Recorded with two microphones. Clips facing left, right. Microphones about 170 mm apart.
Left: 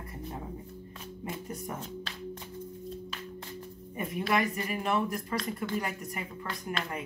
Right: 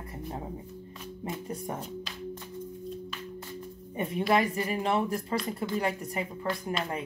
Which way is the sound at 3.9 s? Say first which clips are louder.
Right 4 dB; 30° right (ahead or behind).